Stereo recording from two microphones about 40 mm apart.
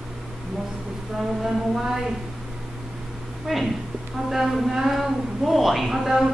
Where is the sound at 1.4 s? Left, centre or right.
Centre.